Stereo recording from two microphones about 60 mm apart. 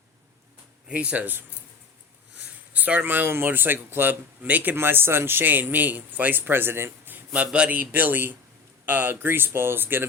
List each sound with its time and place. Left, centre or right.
0.9 s speech: right
2.7 s speech: right
7.3 s speech: centre; by 10.1 s right